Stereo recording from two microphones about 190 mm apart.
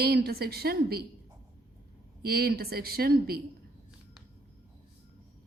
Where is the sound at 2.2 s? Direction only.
55° right (ahead or behind).